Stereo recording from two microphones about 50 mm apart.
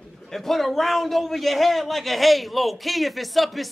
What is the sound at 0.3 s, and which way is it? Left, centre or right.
A man's voice, centre.